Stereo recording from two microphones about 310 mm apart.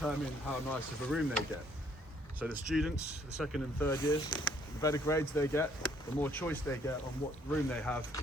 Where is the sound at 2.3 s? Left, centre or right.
Centre.